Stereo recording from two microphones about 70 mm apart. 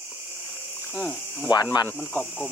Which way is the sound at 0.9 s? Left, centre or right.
Left.